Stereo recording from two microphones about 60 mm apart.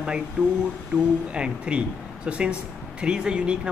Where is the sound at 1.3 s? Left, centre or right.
Centre.